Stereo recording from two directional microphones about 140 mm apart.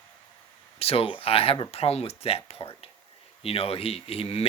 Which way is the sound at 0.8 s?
45° left (ahead or behind).